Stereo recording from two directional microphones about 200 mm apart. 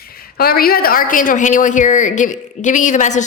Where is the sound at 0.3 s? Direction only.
50° left (ahead or behind).